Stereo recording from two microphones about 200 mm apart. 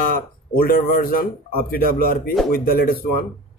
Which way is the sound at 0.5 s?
45° left (ahead or behind).